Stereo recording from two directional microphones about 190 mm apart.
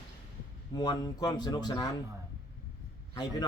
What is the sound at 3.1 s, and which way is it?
Speech, 20° left (ahead or behind).